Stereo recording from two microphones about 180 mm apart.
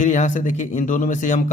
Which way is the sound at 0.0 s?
45° left (ahead or behind).